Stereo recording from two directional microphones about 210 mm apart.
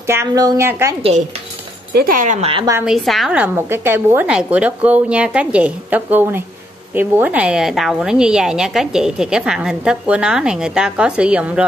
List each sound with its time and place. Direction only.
0.0 s a woman's voice: 15° right (ahead or behind)
2.0 s speech: 40° right (ahead or behind); by 2.7 s 25° right (ahead or behind)
2.8 s a woman's voice: centre (ahead or behind)